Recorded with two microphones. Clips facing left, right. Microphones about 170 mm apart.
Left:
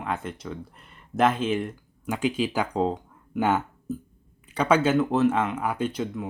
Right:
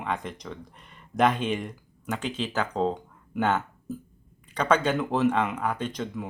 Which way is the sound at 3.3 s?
10° left (ahead or behind).